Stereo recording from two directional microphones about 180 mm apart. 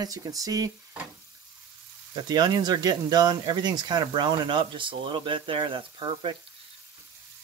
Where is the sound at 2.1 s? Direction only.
25° right (ahead or behind).